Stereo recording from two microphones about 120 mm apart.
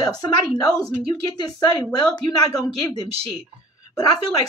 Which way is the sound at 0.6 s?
30° left (ahead or behind).